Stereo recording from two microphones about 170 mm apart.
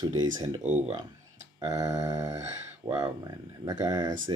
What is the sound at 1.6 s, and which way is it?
Speech, 20° right (ahead or behind).